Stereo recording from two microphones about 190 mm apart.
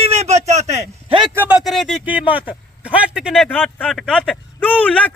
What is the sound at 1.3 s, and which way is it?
A man's voice, 5° right (ahead or behind).